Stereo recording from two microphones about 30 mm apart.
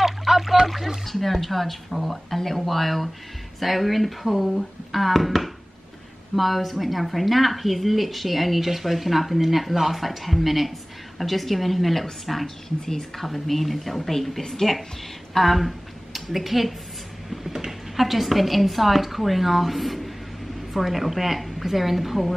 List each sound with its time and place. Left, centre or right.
0.0 s a sound: centre
0.7 s a woman's voice: centre
12.6 s speech: centre
13.2 s a woman's voice: centre